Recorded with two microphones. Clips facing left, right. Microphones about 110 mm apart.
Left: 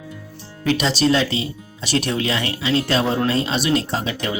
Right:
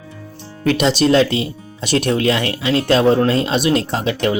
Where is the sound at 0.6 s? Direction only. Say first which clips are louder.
Right 4 dB; 55° right (ahead or behind).